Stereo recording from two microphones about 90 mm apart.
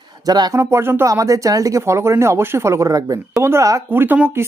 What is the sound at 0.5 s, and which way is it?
Speech, 30° right (ahead or behind).